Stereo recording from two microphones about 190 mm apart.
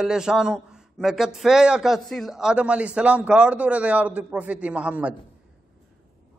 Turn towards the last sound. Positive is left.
turn(degrees=-5)  # may be behind; listen again after turning